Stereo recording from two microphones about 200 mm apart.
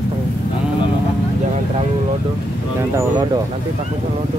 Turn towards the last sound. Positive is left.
turn(degrees=-20)  # may be behind; listen again after turning